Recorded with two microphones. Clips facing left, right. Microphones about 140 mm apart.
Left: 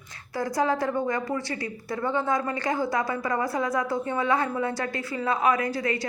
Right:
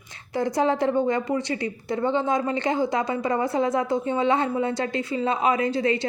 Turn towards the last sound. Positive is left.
turn(degrees=-25)  # may be behind; listen again after turning